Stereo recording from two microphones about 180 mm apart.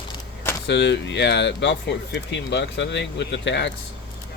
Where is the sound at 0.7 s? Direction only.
75° left (ahead or behind).